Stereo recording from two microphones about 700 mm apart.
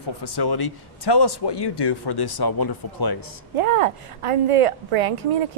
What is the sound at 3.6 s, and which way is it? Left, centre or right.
A woman's voice, right.